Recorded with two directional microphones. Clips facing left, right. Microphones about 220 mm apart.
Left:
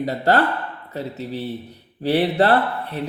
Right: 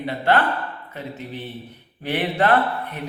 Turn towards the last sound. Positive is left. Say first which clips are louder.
# left 1 dB
turn(degrees=35)  # may be behind; listen again after turning